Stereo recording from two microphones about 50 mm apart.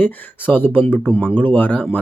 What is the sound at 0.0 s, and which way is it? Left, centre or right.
Speech, left.